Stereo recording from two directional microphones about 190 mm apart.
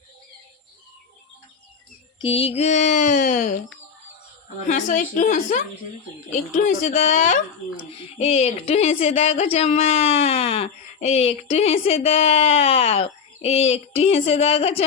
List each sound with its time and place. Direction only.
2.2 s a woman's voice: 30° left (ahead or behind)
4.6 s a woman's voice: 45° left (ahead or behind)
8.2 s speech: 30° left (ahead or behind)